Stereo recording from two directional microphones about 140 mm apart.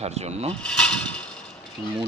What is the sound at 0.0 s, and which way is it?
Speech, 50° right (ahead or behind).